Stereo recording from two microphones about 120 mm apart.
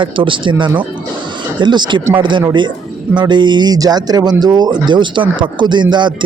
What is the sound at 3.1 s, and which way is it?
Speech, 40° right (ahead or behind).